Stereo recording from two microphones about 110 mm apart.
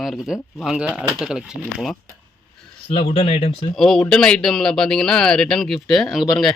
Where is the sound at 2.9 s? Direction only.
70° left (ahead or behind).